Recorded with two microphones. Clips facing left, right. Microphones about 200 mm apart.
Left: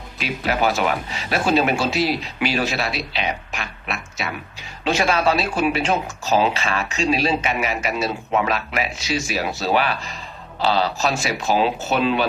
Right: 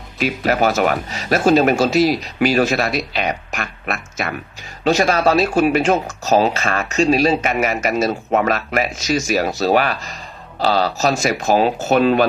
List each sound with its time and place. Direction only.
0.2 s speech: 45° right (ahead or behind)